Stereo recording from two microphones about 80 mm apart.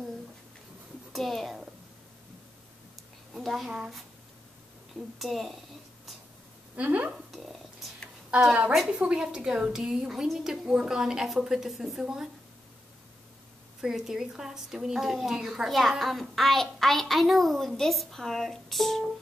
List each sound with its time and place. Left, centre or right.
1.1 s a woman's voice: centre
3.3 s a woman's voice: centre
5.2 s a woman's voice: centre
6.7 s speech: centre
7.2 s a sound: centre
8.3 s a woman's voice: centre
13.7 s a woman's voice: centre